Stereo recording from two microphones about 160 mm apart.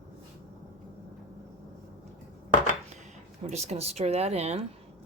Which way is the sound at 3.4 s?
45° right (ahead or behind).